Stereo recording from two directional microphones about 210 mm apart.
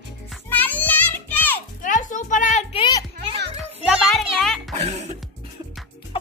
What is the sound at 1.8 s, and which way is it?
Music, 35° left (ahead or behind).